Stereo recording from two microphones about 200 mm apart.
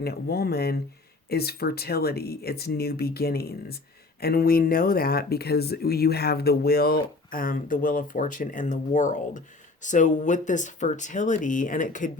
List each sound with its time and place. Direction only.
0.0 s speech: 50° left (ahead or behind)